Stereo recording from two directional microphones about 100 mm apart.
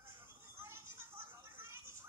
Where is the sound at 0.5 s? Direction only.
25° right (ahead or behind).